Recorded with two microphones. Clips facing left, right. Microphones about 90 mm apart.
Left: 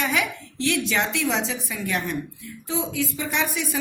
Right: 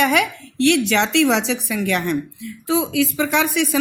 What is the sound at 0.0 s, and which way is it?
A woman's voice, 65° right (ahead or behind).